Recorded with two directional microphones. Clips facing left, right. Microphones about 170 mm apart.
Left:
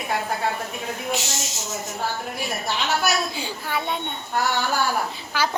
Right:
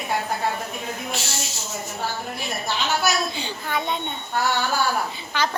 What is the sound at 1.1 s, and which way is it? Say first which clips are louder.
Speech: left 2 dB; 20° left (ahead or behind).